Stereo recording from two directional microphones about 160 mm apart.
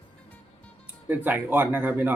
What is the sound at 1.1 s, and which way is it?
Speech, 10° right (ahead or behind).